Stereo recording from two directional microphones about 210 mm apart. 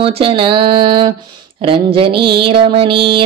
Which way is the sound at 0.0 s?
25° right (ahead or behind).